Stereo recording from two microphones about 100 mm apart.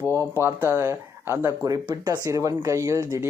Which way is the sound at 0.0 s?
25° right (ahead or behind).